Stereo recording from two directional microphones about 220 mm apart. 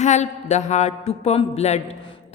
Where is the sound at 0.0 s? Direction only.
30° left (ahead or behind).